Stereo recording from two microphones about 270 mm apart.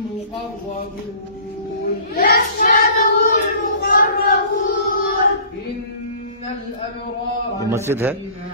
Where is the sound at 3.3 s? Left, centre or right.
Left.